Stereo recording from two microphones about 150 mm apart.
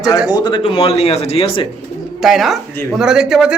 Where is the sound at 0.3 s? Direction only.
30° left (ahead or behind).